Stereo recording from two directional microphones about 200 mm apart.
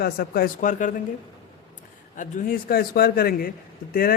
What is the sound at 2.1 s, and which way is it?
A man's voice, 40° left (ahead or behind).